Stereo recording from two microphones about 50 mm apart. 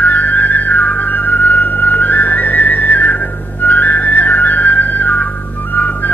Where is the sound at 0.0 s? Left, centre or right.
Left.